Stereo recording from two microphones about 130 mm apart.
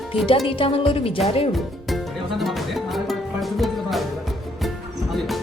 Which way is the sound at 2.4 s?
Centre (ahead or behind).